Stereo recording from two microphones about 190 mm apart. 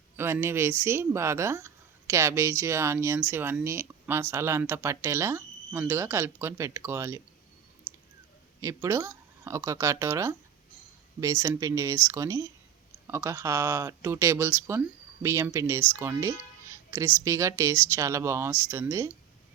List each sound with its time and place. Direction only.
0.2 s speech: 15° right (ahead or behind)
8.6 s speech: 15° right (ahead or behind)